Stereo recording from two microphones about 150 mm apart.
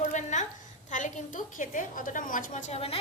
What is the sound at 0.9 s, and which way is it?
Speech, 55° left (ahead or behind).